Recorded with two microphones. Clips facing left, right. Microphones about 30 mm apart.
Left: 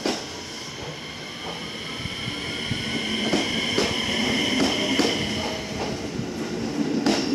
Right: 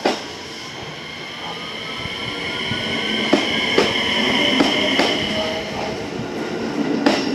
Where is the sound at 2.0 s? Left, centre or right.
Right.